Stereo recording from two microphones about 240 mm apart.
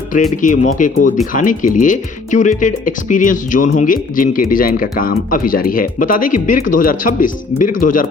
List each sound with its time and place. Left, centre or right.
0.1 s speech: left